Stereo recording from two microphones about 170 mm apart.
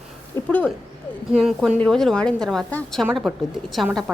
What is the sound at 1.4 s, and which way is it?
A woman's voice, 5° right (ahead or behind).